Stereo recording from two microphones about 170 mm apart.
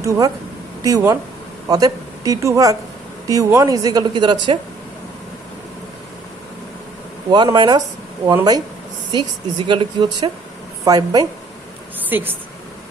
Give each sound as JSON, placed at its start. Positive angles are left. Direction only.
{"t": 0.8, "sound": "a woman's voice", "side_deg": -20}
{"t": 7.2, "sound": "a woman's voice", "side_deg": -25}
{"t": 12.1, "sound": "a woman's voice", "side_deg": -10}